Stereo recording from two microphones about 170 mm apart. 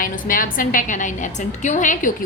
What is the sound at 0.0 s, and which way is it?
A woman's voice, 55° left (ahead or behind).